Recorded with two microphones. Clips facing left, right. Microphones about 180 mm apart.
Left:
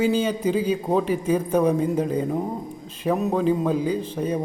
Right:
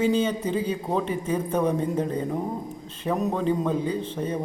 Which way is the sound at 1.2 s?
10° left (ahead or behind).